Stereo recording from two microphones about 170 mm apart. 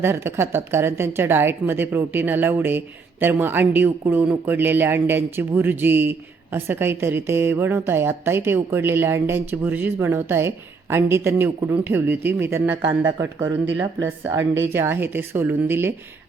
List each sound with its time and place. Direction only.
0.0 s speech: 15° right (ahead or behind)